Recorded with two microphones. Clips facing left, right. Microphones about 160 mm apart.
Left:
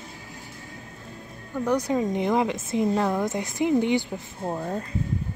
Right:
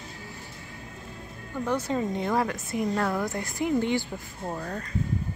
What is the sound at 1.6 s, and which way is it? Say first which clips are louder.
Speech: left 4 dB; 15° left (ahead or behind).